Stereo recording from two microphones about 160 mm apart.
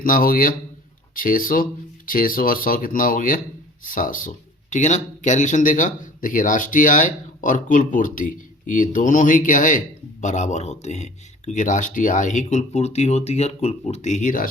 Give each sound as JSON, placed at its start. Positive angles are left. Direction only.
{"t": 0.0, "sound": "speech", "side_deg": 60}
{"t": 4.7, "sound": "speech", "side_deg": 45}